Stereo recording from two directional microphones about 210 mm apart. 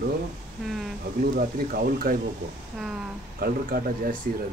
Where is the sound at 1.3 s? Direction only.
45° right (ahead or behind).